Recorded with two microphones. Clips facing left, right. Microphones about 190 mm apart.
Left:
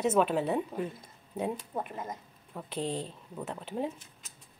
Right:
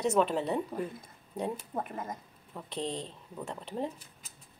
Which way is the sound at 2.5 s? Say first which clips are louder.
Left 2 dB; 5° left (ahead or behind).